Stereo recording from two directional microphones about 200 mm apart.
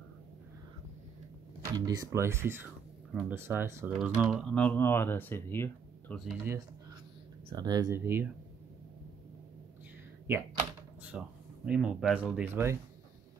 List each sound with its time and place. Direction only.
1.6 s speech: 20° right (ahead or behind)
3.1 s speech: centre (ahead or behind)
3.3 s speech: 10° right (ahead or behind); by 6.3 s 5° left (ahead or behind)
7.4 s speech: 20° right (ahead or behind)
11.1 s speech: 5° right (ahead or behind)